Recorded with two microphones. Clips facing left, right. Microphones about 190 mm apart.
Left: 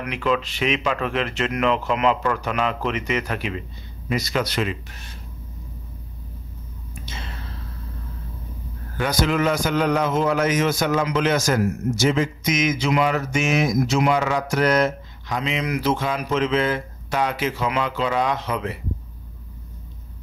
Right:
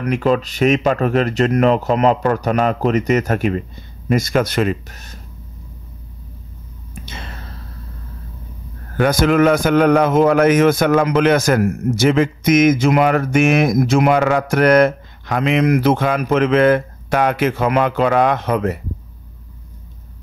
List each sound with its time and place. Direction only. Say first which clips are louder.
0.0 s speech: right 6 dB; 40° right (ahead or behind)
8.9 s a man's voice: right 7 dB; 55° right (ahead or behind)